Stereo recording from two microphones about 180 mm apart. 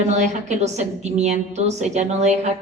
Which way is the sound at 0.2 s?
40° right (ahead or behind).